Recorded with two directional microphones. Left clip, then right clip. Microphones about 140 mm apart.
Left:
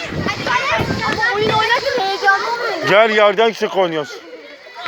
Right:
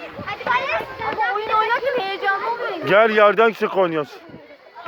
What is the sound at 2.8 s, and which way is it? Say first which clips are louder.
A man's voice: left 2 dB; 50° right (ahead or behind).